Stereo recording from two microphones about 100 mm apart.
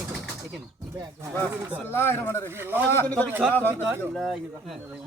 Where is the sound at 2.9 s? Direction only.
15° left (ahead or behind).